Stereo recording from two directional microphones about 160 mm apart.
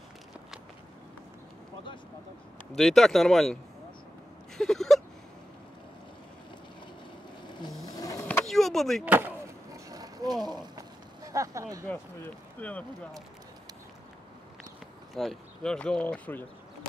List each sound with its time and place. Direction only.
2.7 s speech: centre (ahead or behind)
4.6 s whimper: centre (ahead or behind)
7.4 s vehicle: 30° left (ahead or behind)
8.3 s vehicle: 5° left (ahead or behind)
9.0 s skateboard: 10° right (ahead or behind)
12.5 s speech: 10° left (ahead or behind)
15.1 s speech: 5° left (ahead or behind)